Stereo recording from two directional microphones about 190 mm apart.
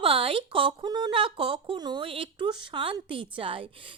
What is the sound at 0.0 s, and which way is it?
Speech, 30° right (ahead or behind).